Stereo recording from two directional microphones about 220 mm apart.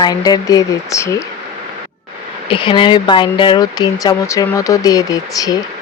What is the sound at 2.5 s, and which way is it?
Speech, 20° left (ahead or behind).